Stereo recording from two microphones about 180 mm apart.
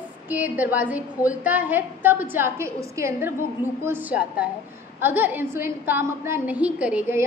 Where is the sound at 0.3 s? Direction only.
10° right (ahead or behind).